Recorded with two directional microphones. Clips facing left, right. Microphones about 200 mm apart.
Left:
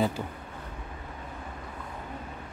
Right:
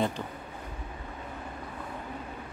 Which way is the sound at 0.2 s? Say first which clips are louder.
Left 2 dB; 10° left (ahead or behind).